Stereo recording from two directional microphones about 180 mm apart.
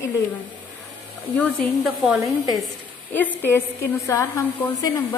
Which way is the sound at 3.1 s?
10° left (ahead or behind).